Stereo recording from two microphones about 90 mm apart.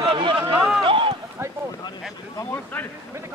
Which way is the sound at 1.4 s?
30° right (ahead or behind).